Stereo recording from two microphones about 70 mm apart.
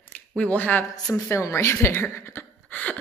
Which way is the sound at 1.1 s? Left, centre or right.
Left.